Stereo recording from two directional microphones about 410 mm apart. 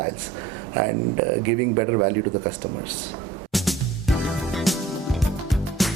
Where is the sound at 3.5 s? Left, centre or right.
Centre.